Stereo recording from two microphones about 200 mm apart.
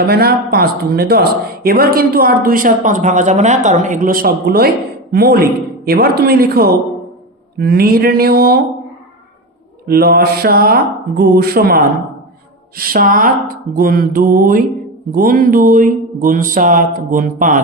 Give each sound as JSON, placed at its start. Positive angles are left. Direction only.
{"t": 0.1, "sound": "speech", "side_deg": -50}
{"t": 9.8, "sound": "speech", "side_deg": -50}